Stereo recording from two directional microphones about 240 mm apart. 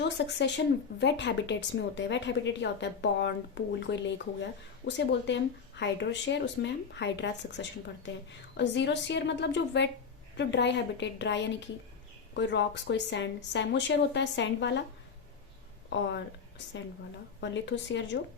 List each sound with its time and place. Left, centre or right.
0.2 s speech: left
17.4 s speech: left